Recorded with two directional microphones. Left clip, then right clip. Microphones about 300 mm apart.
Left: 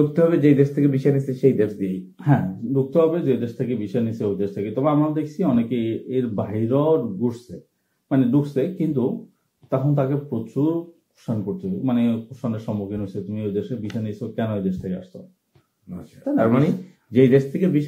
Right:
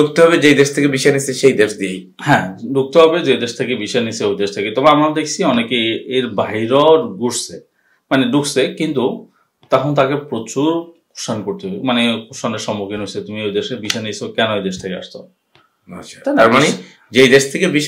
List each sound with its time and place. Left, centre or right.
0.0 s speech: centre
8.1 s speech: centre
8.9 s speech: right
9.7 s speech: centre